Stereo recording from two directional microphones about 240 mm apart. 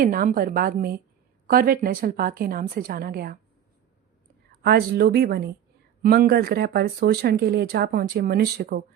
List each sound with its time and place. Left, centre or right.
0.0 s speech: right
4.6 s speech: right